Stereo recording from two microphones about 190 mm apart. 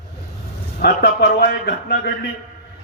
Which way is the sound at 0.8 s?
60° left (ahead or behind).